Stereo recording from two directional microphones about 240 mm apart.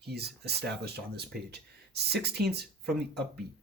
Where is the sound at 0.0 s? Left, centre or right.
Right.